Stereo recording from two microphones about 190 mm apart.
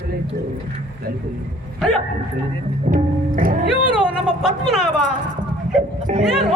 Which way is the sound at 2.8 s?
45° right (ahead or behind).